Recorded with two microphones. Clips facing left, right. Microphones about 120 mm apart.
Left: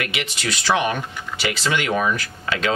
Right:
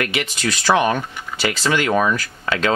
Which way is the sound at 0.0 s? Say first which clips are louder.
Right 4 dB; 40° right (ahead or behind).